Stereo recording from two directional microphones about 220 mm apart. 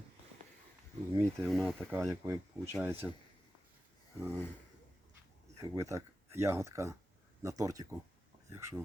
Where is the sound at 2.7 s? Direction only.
10° right (ahead or behind).